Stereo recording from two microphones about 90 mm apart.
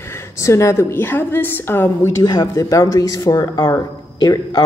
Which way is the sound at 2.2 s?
40° left (ahead or behind).